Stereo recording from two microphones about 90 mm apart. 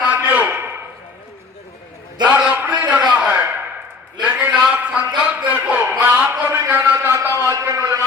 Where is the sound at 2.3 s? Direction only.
20° right (ahead or behind).